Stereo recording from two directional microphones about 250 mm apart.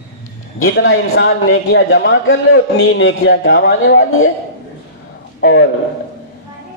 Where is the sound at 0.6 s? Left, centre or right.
Left.